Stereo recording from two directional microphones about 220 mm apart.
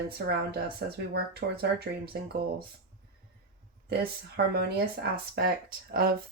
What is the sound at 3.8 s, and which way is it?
Speech, 45° right (ahead or behind).